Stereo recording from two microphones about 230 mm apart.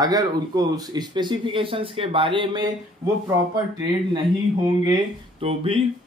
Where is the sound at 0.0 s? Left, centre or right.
Centre.